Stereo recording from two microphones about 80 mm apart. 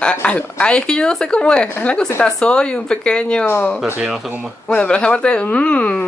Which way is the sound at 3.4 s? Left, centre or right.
Left.